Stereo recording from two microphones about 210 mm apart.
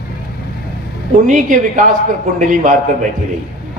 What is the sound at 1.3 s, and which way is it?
A man's voice, 35° right (ahead or behind).